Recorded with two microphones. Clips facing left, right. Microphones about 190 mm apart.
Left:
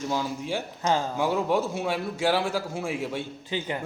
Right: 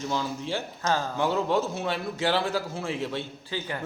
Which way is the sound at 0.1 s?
10° left (ahead or behind).